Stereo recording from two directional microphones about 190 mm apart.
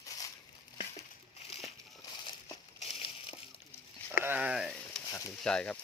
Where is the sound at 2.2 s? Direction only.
25° left (ahead or behind).